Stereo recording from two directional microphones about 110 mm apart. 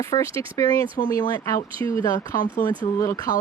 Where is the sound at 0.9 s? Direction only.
40° left (ahead or behind).